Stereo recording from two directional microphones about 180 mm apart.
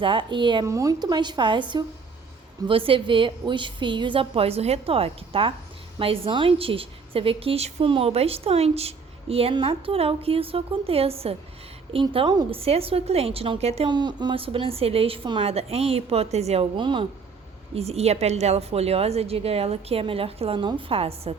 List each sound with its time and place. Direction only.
0.0 s a woman's voice: 25° right (ahead or behind)
2.6 s a woman's voice: 30° right (ahead or behind)